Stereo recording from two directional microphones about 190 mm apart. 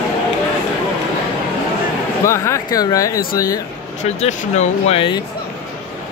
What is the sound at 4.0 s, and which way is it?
Speech, 40° left (ahead or behind).